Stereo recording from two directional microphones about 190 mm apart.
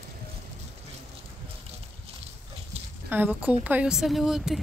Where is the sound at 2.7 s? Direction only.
30° right (ahead or behind).